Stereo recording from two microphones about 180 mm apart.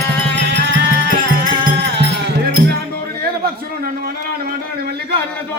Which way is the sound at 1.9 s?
70° right (ahead or behind).